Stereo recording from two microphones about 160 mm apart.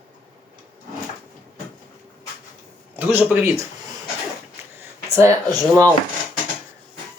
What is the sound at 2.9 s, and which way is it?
Speech, 10° right (ahead or behind).